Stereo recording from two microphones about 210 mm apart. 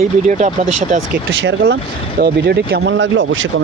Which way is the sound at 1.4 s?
60° right (ahead or behind).